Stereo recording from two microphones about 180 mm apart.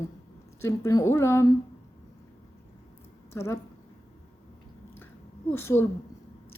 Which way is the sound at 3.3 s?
15° left (ahead or behind).